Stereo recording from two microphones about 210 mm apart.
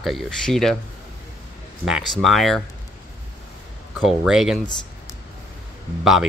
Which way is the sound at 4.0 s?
Centre (ahead or behind).